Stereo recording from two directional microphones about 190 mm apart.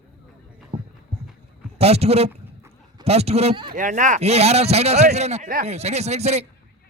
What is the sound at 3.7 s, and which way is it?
Speech, 40° right (ahead or behind).